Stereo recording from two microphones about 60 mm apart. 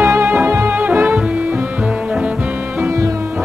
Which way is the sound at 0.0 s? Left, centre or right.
Right.